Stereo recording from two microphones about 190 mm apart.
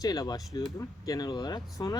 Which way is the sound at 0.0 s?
20° left (ahead or behind).